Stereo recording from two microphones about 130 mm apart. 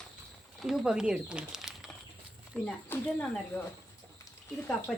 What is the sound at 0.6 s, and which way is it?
Speech, centre (ahead or behind).